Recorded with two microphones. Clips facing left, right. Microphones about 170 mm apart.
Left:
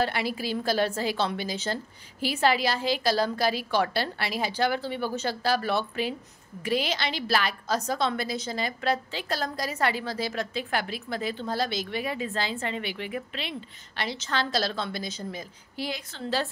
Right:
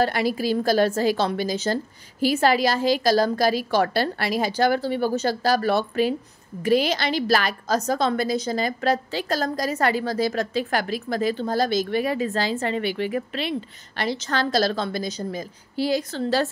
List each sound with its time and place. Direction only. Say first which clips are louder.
0.0 s a woman's voice: right 6 dB; 40° right (ahead or behind)